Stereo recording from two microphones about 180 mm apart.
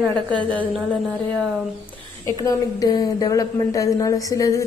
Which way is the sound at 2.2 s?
20° left (ahead or behind).